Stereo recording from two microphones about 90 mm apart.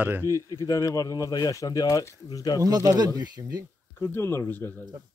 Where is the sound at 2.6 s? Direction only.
40° right (ahead or behind).